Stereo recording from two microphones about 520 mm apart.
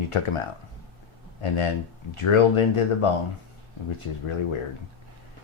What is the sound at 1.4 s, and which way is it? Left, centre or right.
Speech, left.